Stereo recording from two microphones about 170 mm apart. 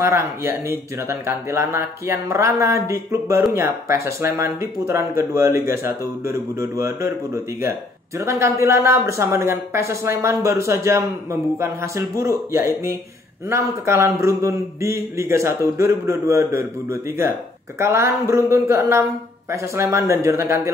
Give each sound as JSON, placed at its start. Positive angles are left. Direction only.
{"t": 0.0, "sound": "a man's voice", "side_deg": -15}
{"t": 8.2, "sound": "a man's voice", "side_deg": -15}